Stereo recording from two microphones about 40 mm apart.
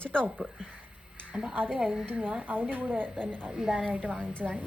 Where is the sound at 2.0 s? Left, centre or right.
Right.